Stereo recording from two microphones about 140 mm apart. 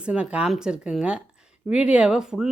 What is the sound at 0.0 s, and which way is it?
Speech, 10° right (ahead or behind).